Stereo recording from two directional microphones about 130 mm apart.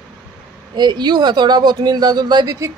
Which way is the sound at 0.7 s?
35° right (ahead or behind).